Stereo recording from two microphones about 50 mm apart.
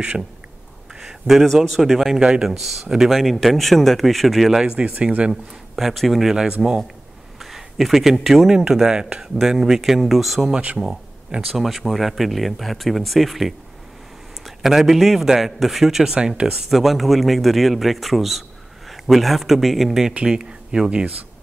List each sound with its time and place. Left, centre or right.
1.0 s speech: centre
4.5 s speech: centre
4.7 s speech: right
5.8 s speech: centre
7.3 s speech: centre